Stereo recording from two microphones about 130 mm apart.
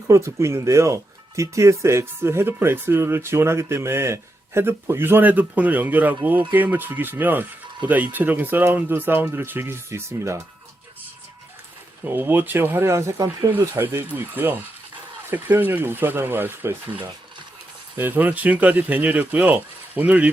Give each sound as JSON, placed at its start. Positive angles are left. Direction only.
{"t": 0.1, "sound": "speech", "side_deg": -20}
{"t": 12.0, "sound": "speech", "side_deg": -15}